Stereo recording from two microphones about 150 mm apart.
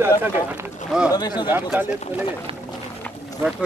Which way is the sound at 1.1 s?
30° left (ahead or behind).